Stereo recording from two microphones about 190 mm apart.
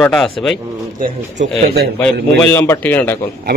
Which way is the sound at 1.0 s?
40° right (ahead or behind).